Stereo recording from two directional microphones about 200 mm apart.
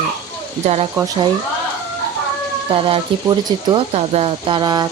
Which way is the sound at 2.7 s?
25° right (ahead or behind).